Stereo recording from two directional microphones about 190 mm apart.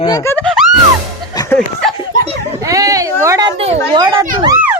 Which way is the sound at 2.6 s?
15° right (ahead or behind).